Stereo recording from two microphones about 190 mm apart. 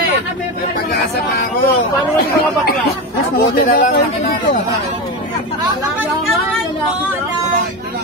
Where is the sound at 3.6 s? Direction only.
40° left (ahead or behind).